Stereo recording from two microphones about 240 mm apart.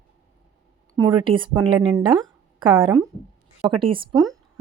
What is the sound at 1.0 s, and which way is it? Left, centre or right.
A woman's voice, right.